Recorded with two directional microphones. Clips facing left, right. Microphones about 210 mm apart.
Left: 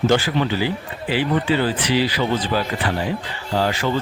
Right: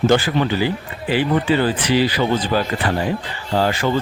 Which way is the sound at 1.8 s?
50° right (ahead or behind).